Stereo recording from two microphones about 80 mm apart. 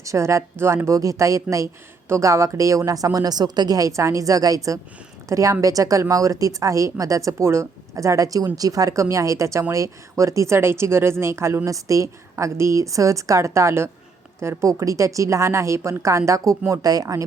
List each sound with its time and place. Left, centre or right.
0.0 s a woman's voice: right